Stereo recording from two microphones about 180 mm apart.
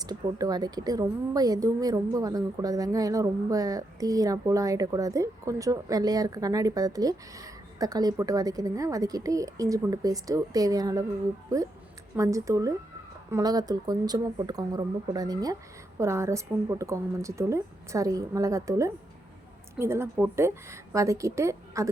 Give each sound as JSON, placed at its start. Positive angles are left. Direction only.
{"t": 0.0, "sound": "speech", "side_deg": -20}
{"t": 12.1, "sound": "a woman's voice", "side_deg": -15}